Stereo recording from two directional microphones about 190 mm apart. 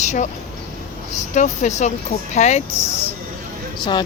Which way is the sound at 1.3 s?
40° left (ahead or behind).